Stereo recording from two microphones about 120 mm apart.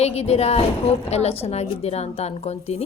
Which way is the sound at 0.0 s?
60° left (ahead or behind).